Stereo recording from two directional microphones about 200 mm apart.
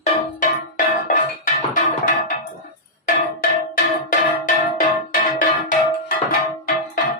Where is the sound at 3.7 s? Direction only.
40° left (ahead or behind).